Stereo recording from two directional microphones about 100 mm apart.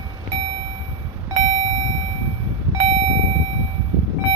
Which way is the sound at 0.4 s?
90° right.